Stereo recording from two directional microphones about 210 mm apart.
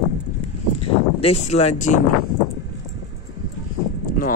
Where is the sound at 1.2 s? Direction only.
30° left (ahead or behind).